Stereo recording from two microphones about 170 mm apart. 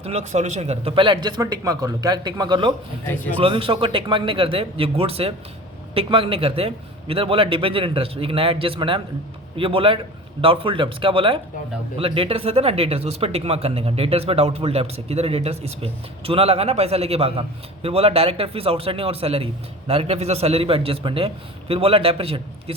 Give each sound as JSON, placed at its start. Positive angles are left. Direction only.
{"t": 0.0, "sound": "speech", "side_deg": -40}
{"t": 3.1, "sound": "a man's voice", "side_deg": 10}
{"t": 3.4, "sound": "speech", "side_deg": -30}